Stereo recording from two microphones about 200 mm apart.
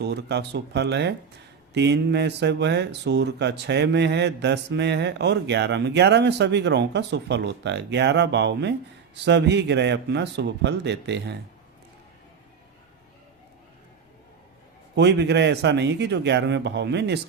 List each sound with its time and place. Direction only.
0.0 s speech: 55° right (ahead or behind)
14.9 s speech: 60° right (ahead or behind)